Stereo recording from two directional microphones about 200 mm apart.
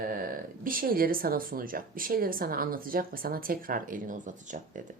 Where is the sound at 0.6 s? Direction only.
45° right (ahead or behind).